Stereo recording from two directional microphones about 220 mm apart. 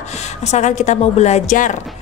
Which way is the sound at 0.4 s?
30° left (ahead or behind).